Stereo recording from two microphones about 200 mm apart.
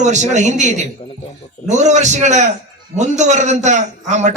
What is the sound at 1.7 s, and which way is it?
A man's voice, 35° right (ahead or behind).